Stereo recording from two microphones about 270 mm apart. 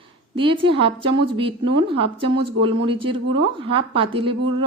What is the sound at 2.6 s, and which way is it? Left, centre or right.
A woman's voice, centre.